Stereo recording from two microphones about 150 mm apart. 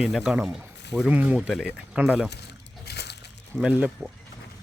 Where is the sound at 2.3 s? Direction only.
90° left.